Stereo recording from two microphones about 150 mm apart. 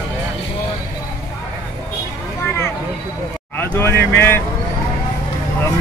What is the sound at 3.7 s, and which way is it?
Speech, 15° left (ahead or behind).